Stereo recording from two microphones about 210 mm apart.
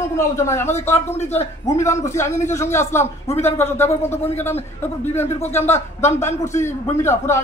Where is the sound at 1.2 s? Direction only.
30° left (ahead or behind).